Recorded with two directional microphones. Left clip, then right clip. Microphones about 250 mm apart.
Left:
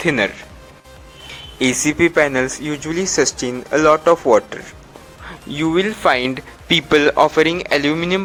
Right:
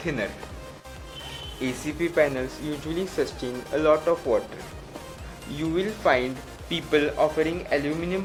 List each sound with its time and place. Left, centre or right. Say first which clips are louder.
0.0 s speech: left 12 dB; left
1.5 s speech: left 14 dB; left
5.5 s speech: left 10 dB; left
6.7 s a man's voice: left 10 dB; left